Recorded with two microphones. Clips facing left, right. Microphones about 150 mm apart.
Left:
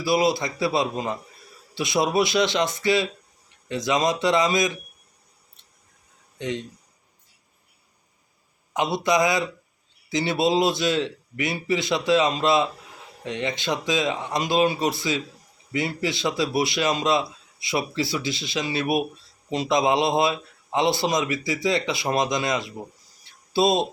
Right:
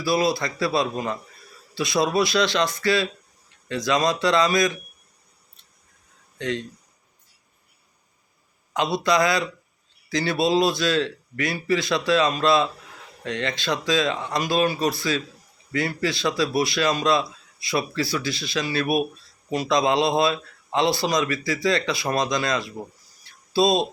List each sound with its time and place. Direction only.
0.0 s a man's voice: 20° left (ahead or behind)
6.4 s speech: 20° left (ahead or behind)
8.7 s a man's voice: 20° left (ahead or behind)
23.2 s a sound: 20° left (ahead or behind)